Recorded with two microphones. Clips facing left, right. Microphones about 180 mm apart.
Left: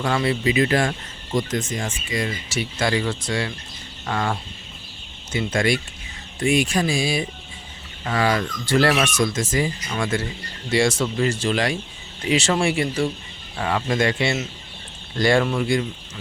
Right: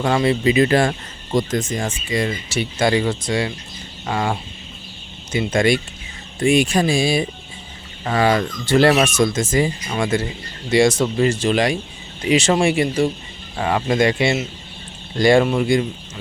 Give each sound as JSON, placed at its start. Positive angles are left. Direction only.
{"t": 0.0, "sound": "speech", "side_deg": -20}